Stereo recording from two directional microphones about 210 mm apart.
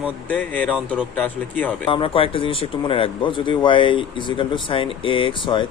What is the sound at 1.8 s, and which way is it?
Speech, 25° left (ahead or behind).